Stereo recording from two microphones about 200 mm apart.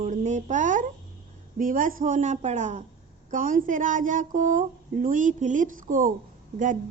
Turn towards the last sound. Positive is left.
turn(degrees=-40)  # may be behind; listen again after turning